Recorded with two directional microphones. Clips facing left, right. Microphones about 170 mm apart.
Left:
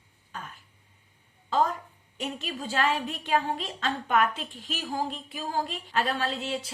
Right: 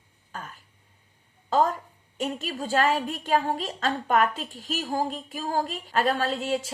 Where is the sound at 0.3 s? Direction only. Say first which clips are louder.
Right 2 dB; 45° right (ahead or behind).